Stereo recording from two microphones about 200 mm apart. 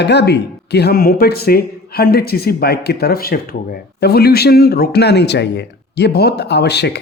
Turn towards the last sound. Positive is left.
turn(degrees=55)  # may be behind; listen again after turning